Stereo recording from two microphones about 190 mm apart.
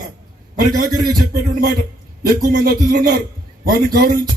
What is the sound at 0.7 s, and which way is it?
A man's voice, 50° right (ahead or behind).